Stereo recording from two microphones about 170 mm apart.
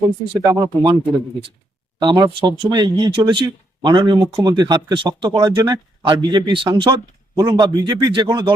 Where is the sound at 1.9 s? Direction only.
25° right (ahead or behind).